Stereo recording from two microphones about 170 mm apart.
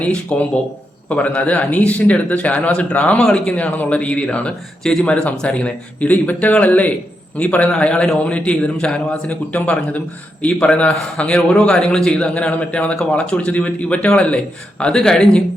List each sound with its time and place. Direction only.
0.0 s a man's voice: 5° left (ahead or behind)